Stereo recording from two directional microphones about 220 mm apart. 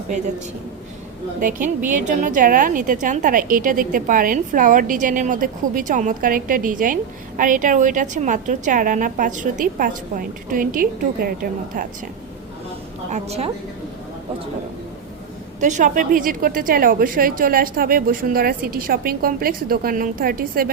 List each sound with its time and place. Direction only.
0.1 s a woman's voice: 30° right (ahead or behind)
1.4 s a woman's voice: 35° right (ahead or behind)
13.1 s a woman's voice: 30° right (ahead or behind)
15.6 s a woman's voice: 35° right (ahead or behind)